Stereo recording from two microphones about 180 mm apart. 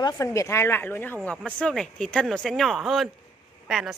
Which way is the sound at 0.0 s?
15° left (ahead or behind).